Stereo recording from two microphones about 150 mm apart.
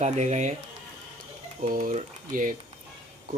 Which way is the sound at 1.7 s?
55° right (ahead or behind).